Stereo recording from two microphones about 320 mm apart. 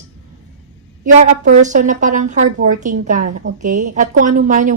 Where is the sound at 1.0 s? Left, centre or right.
Right.